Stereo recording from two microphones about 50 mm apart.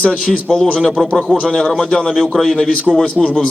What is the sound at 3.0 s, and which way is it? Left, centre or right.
Speech, centre.